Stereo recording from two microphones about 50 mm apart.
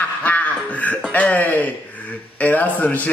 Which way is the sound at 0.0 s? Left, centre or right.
Left.